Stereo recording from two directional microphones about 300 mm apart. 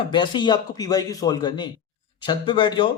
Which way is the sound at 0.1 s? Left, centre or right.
Centre.